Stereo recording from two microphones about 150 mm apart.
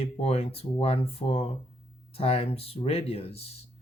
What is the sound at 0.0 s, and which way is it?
Speech, 40° left (ahead or behind).